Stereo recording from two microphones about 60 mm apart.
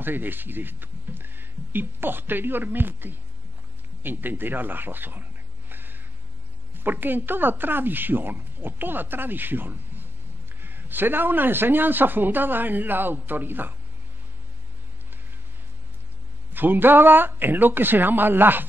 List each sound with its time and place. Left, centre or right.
0.0 s speech: right
5.7 s a sound: right
6.8 s speech: right
16.5 s speech: right